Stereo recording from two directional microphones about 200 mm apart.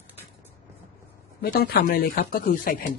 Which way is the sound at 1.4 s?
50° left (ahead or behind).